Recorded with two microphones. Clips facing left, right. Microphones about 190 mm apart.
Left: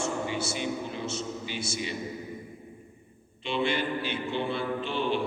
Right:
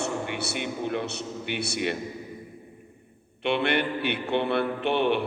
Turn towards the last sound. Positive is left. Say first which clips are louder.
# right 5 dB
turn(degrees=-65)  # may be behind; listen again after turning